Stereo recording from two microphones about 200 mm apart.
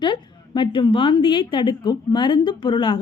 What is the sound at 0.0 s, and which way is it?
A woman's voice, 25° left (ahead or behind).